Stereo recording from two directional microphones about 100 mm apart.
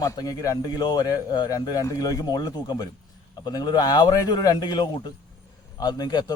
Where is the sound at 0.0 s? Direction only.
35° left (ahead or behind).